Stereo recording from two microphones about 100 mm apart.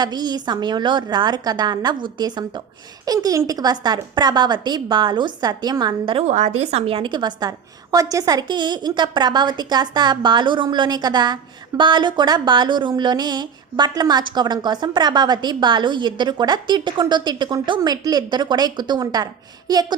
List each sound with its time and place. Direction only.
0.0 s a woman's voice: 45° right (ahead or behind)
6.7 s a woman's voice: 80° right; by 20.0 s 40° right (ahead or behind)